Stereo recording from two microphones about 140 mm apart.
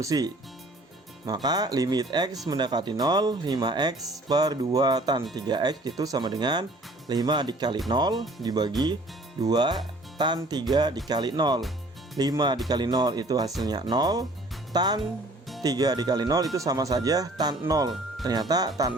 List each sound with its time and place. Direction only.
0.0 s speech: 25° right (ahead or behind)